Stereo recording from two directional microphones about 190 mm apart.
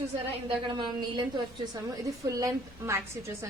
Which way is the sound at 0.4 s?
25° right (ahead or behind).